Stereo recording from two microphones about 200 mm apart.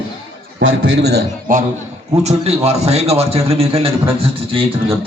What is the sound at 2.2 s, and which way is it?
A man's voice, 30° right (ahead or behind).